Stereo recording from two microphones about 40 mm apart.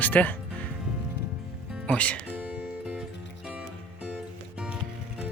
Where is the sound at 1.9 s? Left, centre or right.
Left.